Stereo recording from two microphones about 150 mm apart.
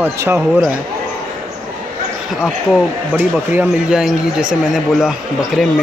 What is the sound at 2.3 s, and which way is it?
Speech, 5° right (ahead or behind).